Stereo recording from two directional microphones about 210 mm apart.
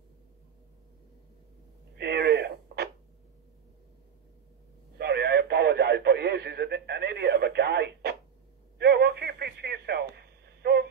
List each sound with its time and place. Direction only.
2.0 s radio: 50° right (ahead or behind)
4.9 s radio: 50° right (ahead or behind)